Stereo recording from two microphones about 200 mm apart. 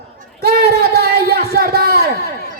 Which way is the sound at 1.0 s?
50° right (ahead or behind).